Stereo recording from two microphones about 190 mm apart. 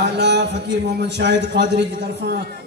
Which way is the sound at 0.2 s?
65° right (ahead or behind).